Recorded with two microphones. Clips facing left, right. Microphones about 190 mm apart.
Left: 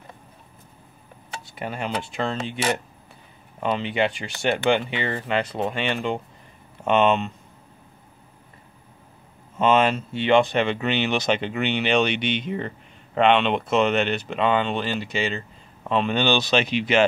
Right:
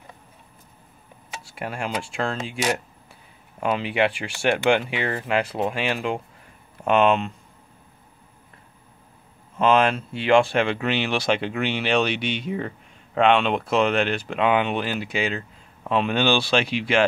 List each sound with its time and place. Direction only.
1.5 s speech: centre (ahead or behind)
9.6 s speech: centre (ahead or behind)